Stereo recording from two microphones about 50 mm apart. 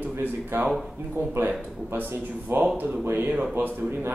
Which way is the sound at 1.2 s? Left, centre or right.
Right.